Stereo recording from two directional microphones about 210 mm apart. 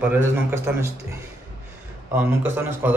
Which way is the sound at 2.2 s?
10° right (ahead or behind).